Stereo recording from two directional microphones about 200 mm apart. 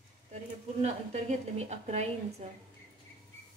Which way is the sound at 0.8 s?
35° right (ahead or behind).